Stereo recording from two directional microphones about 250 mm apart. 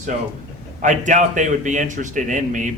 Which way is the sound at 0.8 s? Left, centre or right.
Right.